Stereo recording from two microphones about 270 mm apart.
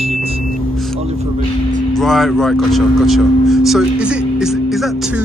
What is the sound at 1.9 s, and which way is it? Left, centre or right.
Speech, centre.